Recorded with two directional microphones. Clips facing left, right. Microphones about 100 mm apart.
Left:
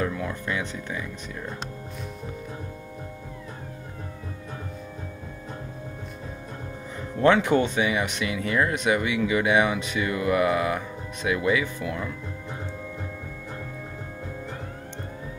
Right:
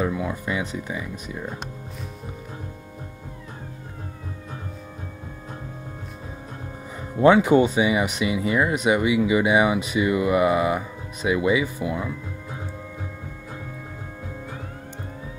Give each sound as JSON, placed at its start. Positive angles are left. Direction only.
{"t": 0.0, "sound": "speech", "side_deg": -15}
{"t": 7.0, "sound": "speech", "side_deg": -15}